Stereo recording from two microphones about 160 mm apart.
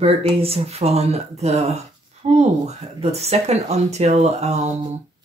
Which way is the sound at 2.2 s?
45° right (ahead or behind).